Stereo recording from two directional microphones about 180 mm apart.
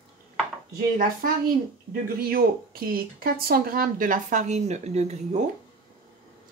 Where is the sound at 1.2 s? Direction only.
50° right (ahead or behind).